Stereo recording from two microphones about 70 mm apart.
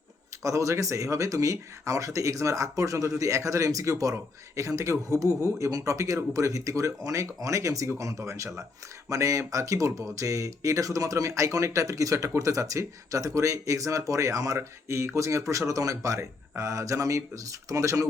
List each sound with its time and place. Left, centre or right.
0.4 s speech: right